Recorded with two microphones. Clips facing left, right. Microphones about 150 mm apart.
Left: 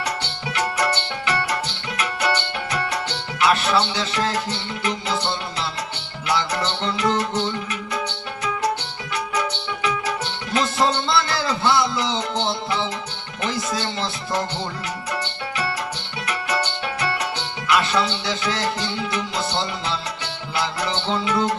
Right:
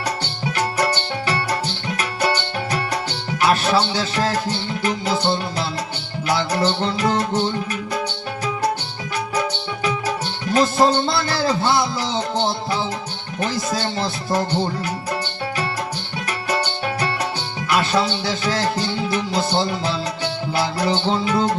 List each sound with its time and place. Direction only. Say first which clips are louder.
0.8 s music: right 2 dB; 35° right (ahead or behind)
9.3 s music: right 2 dB; 40° right (ahead or behind)
13.4 s speech: right 2 dB; 40° right (ahead or behind)
17.7 s music: right 1 dB; 40° right (ahead or behind)